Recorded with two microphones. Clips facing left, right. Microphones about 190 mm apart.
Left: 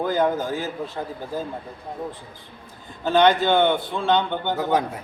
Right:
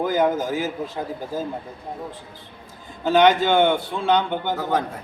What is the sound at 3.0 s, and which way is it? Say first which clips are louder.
A man's voice: right 1 dB; 10° right (ahead or behind).